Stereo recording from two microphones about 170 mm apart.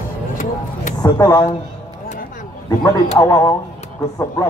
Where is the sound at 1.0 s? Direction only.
25° left (ahead or behind).